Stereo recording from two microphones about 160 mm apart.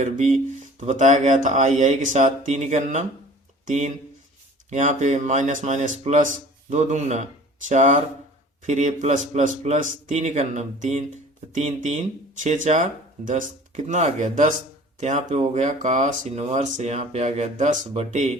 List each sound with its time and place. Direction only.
0.0 s speech: 45° right (ahead or behind)